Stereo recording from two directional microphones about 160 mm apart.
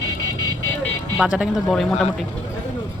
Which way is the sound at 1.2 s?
5° right (ahead or behind).